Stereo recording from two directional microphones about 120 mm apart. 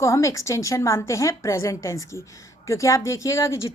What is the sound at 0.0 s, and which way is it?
Speech, 25° left (ahead or behind).